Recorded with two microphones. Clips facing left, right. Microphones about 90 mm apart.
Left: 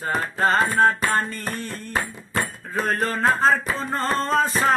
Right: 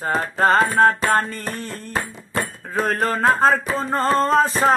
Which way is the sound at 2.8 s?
45° right (ahead or behind).